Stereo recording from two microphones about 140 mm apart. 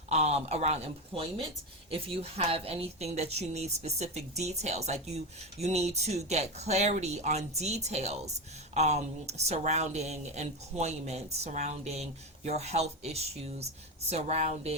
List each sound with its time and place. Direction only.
0.1 s a woman's voice: 50° right (ahead or behind)